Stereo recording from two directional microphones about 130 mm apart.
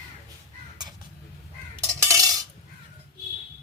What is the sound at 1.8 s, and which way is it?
Cutlery, 20° right (ahead or behind).